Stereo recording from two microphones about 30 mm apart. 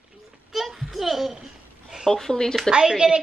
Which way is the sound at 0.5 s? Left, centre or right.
Centre.